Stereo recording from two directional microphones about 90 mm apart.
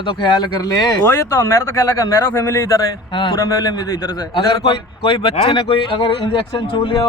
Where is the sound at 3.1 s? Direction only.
65° left (ahead or behind).